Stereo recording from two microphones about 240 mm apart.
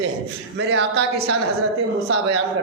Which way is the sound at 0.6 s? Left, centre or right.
Right.